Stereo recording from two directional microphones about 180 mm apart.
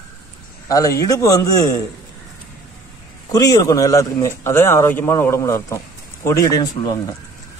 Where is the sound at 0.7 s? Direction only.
20° left (ahead or behind).